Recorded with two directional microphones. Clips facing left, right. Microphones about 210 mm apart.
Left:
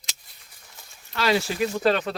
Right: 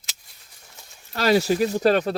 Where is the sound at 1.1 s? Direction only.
40° right (ahead or behind).